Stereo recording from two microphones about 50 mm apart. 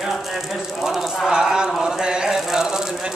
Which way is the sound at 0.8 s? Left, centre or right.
Centre.